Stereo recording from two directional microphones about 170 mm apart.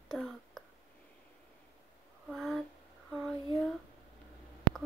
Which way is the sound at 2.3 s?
Centre (ahead or behind).